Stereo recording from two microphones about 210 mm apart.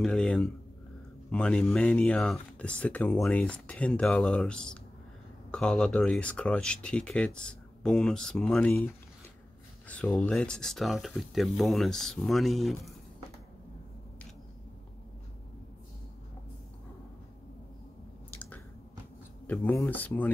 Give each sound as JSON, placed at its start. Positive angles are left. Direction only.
{"t": 0.0, "sound": "speech", "side_deg": 5}
{"t": 9.8, "sound": "speech", "side_deg": 5}
{"t": 19.4, "sound": "speech", "side_deg": 10}